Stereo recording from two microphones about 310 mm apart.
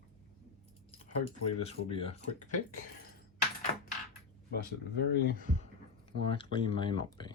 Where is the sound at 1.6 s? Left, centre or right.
Centre.